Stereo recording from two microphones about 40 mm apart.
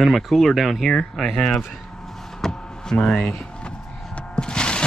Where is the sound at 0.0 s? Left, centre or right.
Centre.